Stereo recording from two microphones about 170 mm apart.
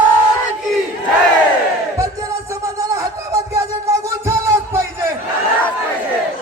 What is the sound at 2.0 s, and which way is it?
Music, 20° right (ahead or behind).